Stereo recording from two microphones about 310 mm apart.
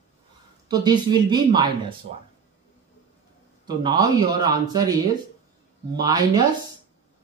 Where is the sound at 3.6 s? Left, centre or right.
Centre.